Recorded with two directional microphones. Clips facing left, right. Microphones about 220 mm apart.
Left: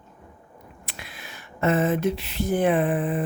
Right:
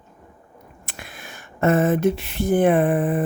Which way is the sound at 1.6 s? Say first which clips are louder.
Right 4 dB; 50° right (ahead or behind).